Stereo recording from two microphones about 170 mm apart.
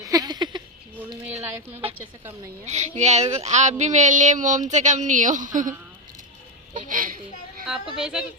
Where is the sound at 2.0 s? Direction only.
15° right (ahead or behind).